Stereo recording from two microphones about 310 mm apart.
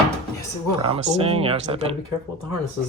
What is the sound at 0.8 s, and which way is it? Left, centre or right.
Speech, centre.